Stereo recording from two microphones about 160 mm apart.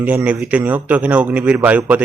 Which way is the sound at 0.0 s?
10° right (ahead or behind).